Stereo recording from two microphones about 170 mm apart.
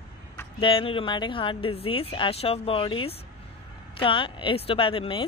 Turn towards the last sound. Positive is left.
turn(degrees=30)  # may be behind; listen again after turning